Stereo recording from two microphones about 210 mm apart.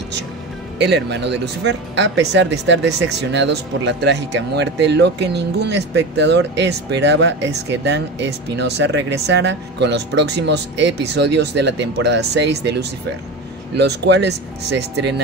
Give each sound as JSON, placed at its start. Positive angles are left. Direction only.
{"t": 0.7, "sound": "speech", "side_deg": -55}